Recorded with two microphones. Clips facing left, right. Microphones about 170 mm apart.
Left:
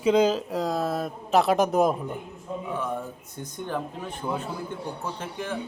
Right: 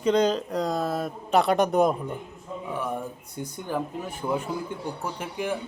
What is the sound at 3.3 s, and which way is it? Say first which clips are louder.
A man's voice: right 1 dB; 10° right (ahead or behind).